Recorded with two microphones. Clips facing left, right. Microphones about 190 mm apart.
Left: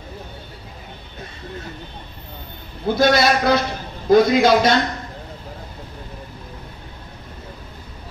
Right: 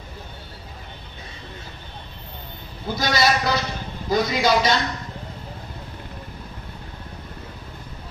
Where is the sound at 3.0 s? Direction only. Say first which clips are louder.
Left 5 dB; 55° left (ahead or behind).